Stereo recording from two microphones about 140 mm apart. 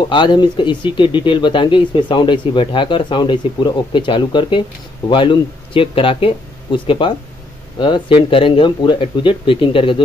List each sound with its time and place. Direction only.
0.1 s speech: 35° left (ahead or behind)